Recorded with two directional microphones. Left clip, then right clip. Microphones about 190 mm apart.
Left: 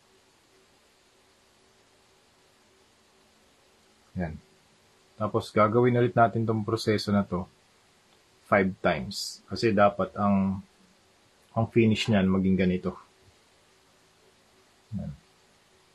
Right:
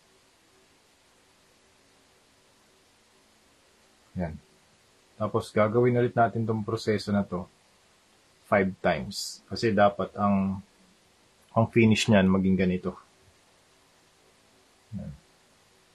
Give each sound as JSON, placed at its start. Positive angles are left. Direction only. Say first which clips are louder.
{"t": 5.2, "sound": "speech", "louder": "left 1 dB", "side_deg": 5}
{"t": 8.5, "sound": "speech", "louder": "even", "side_deg": 5}
{"t": 11.5, "sound": "speech", "louder": "right 2 dB", "side_deg": -15}